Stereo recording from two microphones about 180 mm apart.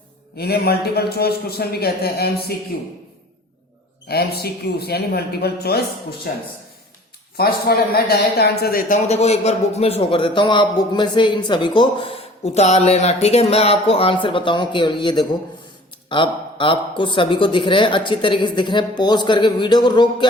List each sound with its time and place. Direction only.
0.3 s a man's voice: 60° left (ahead or behind)
4.1 s a man's voice: 60° left (ahead or behind)
7.3 s a man's voice: 60° left (ahead or behind)
9.0 s a man's voice: 35° left (ahead or behind)